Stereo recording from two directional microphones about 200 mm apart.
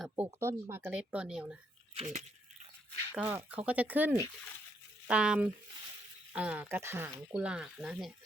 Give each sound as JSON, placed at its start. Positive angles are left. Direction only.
{"t": 0.3, "sound": "speech", "side_deg": -15}
{"t": 2.0, "sound": "a sound", "side_deg": -35}
{"t": 3.1, "sound": "speech", "side_deg": -10}